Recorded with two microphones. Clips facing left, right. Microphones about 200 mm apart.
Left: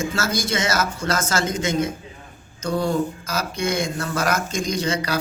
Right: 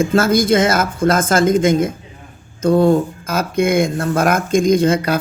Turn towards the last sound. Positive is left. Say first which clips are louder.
# right 10 dB
turn(degrees=-55)  # may be behind; listen again after turning